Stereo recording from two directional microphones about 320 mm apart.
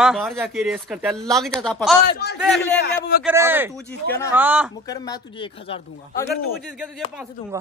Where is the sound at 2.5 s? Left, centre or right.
Centre.